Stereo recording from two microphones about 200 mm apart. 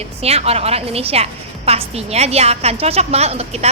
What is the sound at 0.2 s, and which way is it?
A woman's voice, 30° right (ahead or behind).